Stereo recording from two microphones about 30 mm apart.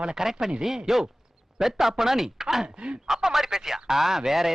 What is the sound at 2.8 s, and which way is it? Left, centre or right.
Speech, right.